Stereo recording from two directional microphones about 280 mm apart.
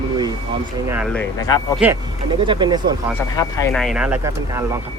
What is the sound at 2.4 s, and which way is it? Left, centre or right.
Speech, centre.